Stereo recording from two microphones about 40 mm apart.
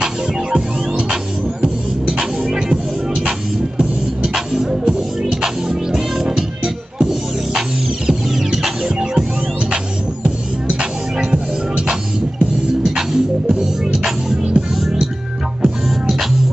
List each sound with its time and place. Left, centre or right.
0.0 s music: right
10.2 s music: right; by 16.3 s centre